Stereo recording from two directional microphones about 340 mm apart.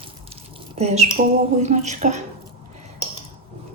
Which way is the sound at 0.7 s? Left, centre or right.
Centre.